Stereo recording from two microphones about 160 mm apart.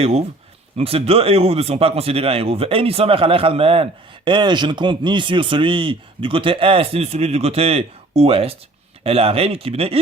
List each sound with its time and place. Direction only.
0.0 s speech: 40° right (ahead or behind)